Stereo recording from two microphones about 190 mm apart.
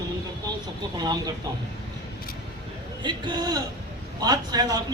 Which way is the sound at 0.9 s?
20° right (ahead or behind).